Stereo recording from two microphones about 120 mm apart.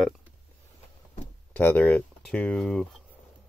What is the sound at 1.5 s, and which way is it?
Speech, 15° left (ahead or behind).